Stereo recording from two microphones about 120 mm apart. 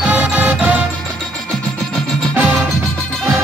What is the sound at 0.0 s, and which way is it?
Music, 10° right (ahead or behind).